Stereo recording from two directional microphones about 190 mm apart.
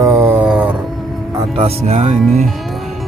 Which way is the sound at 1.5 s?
35° right (ahead or behind).